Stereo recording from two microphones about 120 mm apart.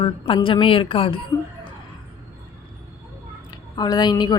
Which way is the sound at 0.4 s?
45° left (ahead or behind).